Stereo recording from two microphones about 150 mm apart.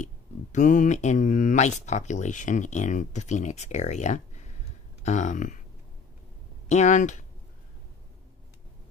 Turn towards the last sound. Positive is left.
turn(degrees=55)  # may be behind; listen again after turning